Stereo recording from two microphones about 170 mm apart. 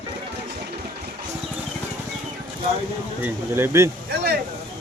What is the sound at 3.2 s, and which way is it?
Speech, 15° right (ahead or behind).